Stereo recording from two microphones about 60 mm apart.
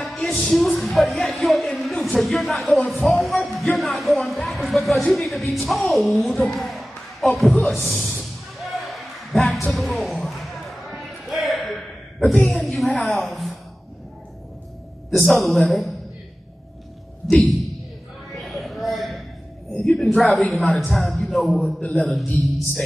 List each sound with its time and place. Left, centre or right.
0.0 s speech: centre
1.8 s a sound: centre
2.1 s a man's voice: centre
3.5 s music: centre
4.5 s a man's voice: centre
8.2 s a sound: centre
9.9 s basketball bounce: centre
12.4 s a sound: centre
13.0 s a woman's voice: centre
15.0 s a man's voice: centre
17.3 s a sound: centre
19.9 s a woman's voice: centre
21.8 s a man's voice: left